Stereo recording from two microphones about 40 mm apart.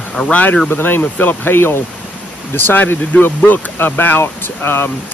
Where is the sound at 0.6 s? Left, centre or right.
Left.